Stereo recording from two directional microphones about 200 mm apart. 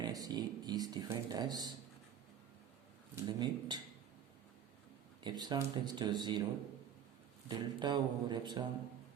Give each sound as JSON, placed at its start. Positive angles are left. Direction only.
{"t": 0.0, "sound": "speech", "side_deg": -20}
{"t": 3.2, "sound": "speech", "side_deg": -20}
{"t": 5.2, "sound": "speech", "side_deg": -20}
{"t": 7.4, "sound": "speech", "side_deg": -20}